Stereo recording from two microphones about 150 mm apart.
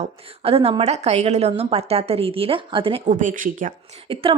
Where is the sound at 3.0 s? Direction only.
60° right (ahead or behind).